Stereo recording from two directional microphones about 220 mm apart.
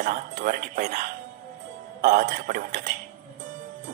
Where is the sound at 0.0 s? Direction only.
35° right (ahead or behind).